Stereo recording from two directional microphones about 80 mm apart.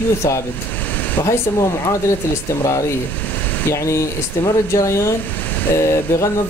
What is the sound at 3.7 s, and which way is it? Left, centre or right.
Speech, left.